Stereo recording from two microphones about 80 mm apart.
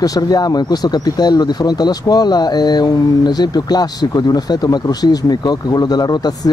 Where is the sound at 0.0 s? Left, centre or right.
Left.